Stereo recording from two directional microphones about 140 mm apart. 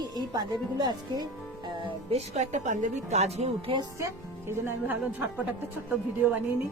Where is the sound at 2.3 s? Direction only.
55° right (ahead or behind).